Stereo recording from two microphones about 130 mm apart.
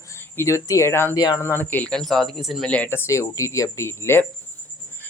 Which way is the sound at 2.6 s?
10° left (ahead or behind).